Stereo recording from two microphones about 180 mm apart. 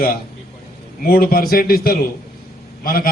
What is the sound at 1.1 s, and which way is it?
A man's voice, 55° left (ahead or behind).